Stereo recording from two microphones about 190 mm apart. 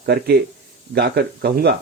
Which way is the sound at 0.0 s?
55° right (ahead or behind).